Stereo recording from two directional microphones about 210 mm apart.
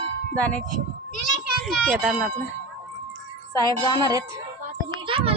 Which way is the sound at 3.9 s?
20° right (ahead or behind).